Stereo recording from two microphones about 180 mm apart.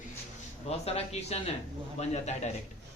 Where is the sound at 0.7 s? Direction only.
35° left (ahead or behind).